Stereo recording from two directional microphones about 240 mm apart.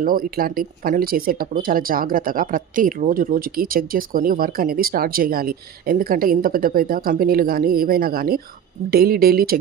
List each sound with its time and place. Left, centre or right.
0.0 s speech: right